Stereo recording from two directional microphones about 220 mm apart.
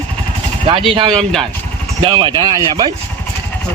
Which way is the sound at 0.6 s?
25° right (ahead or behind).